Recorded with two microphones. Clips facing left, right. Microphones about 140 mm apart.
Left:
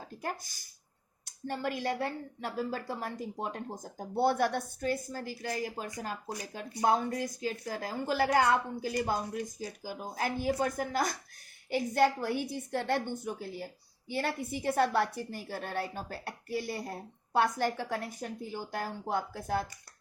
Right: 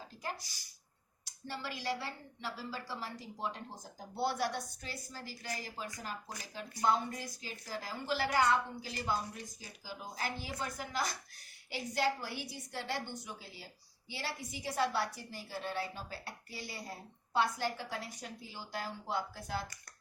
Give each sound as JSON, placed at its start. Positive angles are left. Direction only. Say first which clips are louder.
{"t": 0.1, "sound": "a woman's voice", "louder": "left 5 dB", "side_deg": 55}